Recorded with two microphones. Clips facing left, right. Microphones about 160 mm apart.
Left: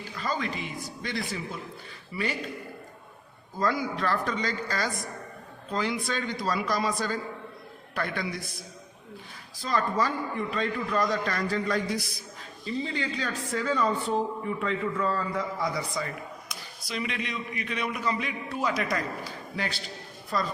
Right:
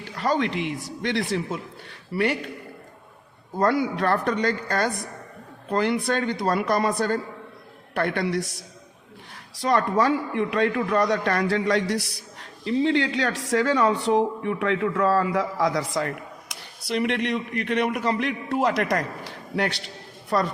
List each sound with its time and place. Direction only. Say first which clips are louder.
0.0 s a man's voice: right 7 dB; 70° right (ahead or behind)
2.1 s speech: right 7 dB; 65° right (ahead or behind)
3.6 s a man's voice: right 6 dB; 65° right (ahead or behind)